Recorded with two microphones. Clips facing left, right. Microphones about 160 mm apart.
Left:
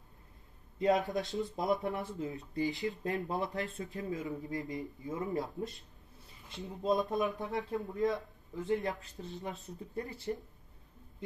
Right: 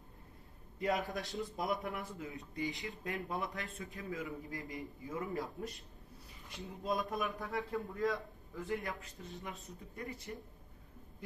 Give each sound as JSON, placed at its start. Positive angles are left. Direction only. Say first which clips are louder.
{"t": 0.7, "sound": "a man's voice", "louder": "left 6 dB", "side_deg": 20}
{"t": 1.8, "sound": "a man's voice", "louder": "left 6 dB", "side_deg": 40}